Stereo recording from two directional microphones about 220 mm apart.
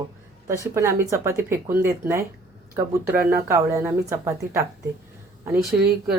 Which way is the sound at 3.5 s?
10° right (ahead or behind).